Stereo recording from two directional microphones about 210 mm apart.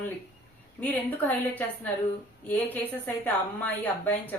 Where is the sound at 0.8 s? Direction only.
10° left (ahead or behind).